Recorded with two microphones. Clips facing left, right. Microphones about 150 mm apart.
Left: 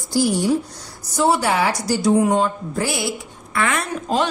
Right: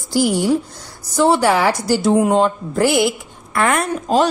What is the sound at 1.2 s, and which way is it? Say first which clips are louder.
A woman's voice: right 4 dB; 90° right.